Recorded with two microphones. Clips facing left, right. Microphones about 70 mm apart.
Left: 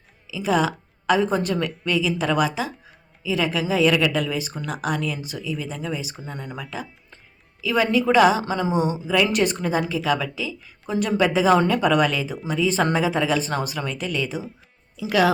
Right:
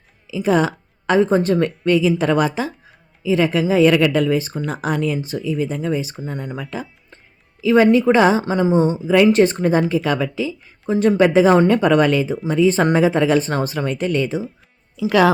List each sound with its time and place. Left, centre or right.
0.3 s a woman's voice: right